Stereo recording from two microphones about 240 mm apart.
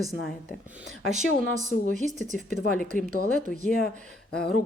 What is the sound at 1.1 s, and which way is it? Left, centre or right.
Speech, right.